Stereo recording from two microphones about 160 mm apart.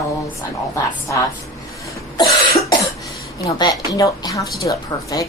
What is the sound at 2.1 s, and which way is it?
Cough, 25° left (ahead or behind).